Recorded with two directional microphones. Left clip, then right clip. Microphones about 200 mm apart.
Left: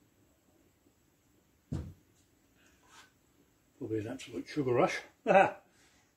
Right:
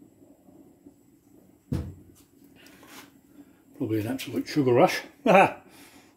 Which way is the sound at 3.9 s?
25° right (ahead or behind).